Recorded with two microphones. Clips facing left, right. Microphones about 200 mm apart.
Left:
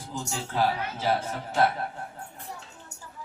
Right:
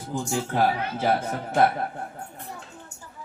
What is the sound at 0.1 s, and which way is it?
A man's voice, 55° right (ahead or behind).